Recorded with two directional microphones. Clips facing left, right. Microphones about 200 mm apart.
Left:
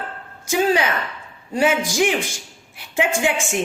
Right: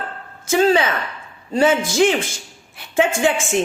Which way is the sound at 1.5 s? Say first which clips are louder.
Right 3 dB; 10° left (ahead or behind).